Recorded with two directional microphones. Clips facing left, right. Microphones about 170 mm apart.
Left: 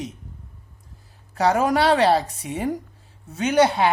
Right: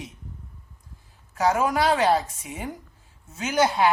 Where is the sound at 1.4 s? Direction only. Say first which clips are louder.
Left 3 dB; 35° left (ahead or behind).